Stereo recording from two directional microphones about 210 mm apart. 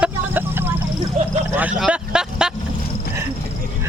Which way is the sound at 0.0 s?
10° right (ahead or behind).